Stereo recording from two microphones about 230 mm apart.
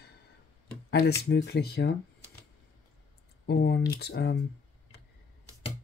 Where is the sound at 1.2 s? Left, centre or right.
Left.